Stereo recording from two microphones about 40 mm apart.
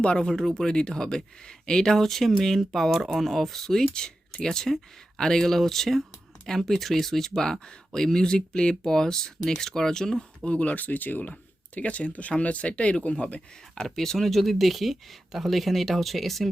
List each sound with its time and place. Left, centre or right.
0.0 s speech: left
10.4 s speech: left
10.8 s speech: left
13.8 s speech: centre